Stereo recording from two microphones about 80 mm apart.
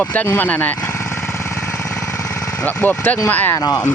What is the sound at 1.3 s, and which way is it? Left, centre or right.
Engine, left.